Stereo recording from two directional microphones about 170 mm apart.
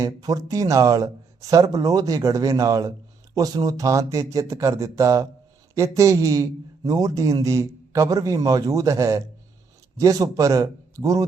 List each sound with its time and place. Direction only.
0.0 s speech: 20° right (ahead or behind)